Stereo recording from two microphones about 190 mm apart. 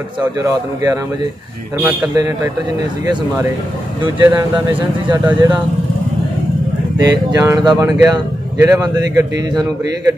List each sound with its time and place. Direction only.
0.4 s speech: 20° right (ahead or behind)
4.4 s speech: 15° right (ahead or behind)
7.0 s speech: 20° right (ahead or behind)